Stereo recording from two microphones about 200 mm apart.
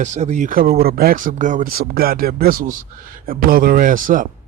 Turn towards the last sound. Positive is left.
turn(degrees=-40)  # may be behind; listen again after turning